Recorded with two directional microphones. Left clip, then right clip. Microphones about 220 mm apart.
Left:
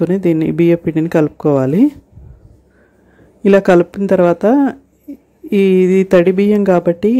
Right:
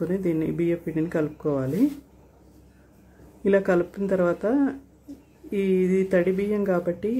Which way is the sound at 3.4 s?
40° left (ahead or behind).